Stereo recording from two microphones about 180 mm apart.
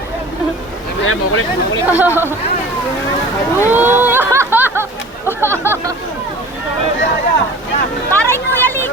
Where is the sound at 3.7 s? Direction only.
10° right (ahead or behind).